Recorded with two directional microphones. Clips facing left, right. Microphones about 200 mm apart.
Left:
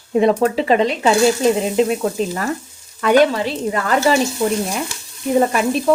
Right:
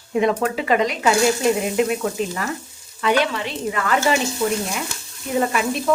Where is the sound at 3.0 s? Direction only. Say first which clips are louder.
Left 6 dB; 45° left (ahead or behind).